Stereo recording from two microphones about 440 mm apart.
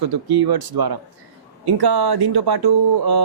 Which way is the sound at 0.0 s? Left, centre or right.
Right.